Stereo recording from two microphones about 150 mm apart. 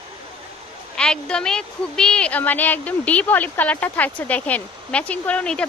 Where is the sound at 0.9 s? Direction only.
5° left (ahead or behind).